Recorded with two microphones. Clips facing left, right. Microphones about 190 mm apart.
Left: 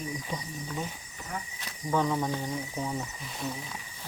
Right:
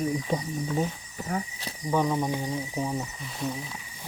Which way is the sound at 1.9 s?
15° right (ahead or behind).